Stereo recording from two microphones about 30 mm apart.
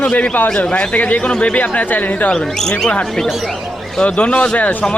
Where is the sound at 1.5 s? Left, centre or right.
Left.